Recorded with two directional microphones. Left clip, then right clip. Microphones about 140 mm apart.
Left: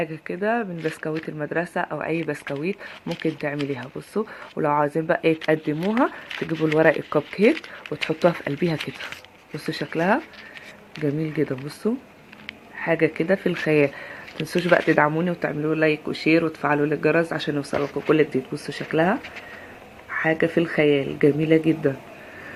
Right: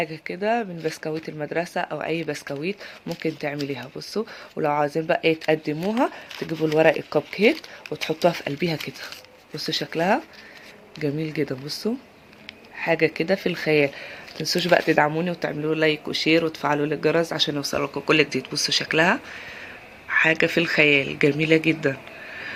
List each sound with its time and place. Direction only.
0.0 s speech: 15° right (ahead or behind)
6.2 s speech: centre (ahead or behind)
8.3 s speech: 15° right (ahead or behind)
8.8 s speech: centre (ahead or behind)
9.8 s speech: 20° right (ahead or behind)
14.8 s speech: 20° right (ahead or behind)
15.1 s speech: 5° right (ahead or behind)